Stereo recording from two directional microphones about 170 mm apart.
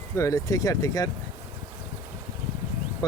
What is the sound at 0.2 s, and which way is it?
Speech, 20° left (ahead or behind).